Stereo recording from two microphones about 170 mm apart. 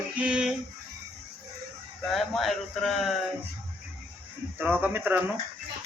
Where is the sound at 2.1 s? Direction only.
Centre (ahead or behind).